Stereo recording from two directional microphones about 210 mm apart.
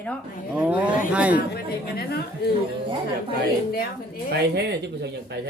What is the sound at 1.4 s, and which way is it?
A woman's voice, 45° left (ahead or behind).